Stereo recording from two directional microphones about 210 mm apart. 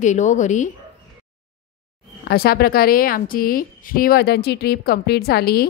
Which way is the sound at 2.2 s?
45° left (ahead or behind).